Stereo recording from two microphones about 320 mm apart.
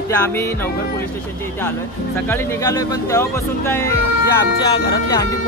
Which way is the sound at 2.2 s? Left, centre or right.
Centre.